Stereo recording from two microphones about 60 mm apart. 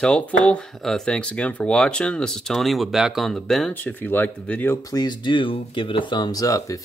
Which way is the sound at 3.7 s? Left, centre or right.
Left.